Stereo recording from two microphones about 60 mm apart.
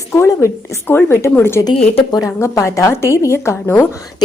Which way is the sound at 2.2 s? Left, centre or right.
Left.